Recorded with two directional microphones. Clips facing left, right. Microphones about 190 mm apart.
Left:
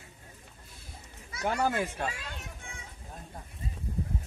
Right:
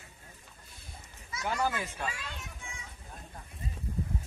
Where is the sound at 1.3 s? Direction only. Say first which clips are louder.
Left 3 dB; 55° left (ahead or behind).